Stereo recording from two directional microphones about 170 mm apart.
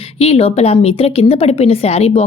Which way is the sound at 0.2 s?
35° left (ahead or behind).